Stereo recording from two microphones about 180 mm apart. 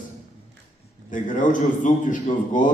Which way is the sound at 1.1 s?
45° left (ahead or behind).